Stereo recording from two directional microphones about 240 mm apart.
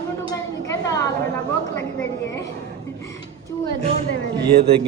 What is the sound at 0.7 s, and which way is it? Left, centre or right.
Speech, centre.